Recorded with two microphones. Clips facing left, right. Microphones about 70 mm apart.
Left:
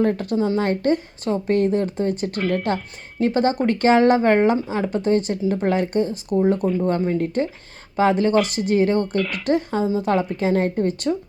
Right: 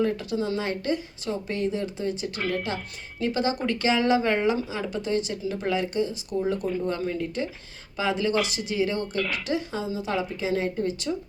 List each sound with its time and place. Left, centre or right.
0.0 s speech: left
2.4 s speech: centre
3.2 s speech: left
9.1 s speech: centre
9.5 s speech: left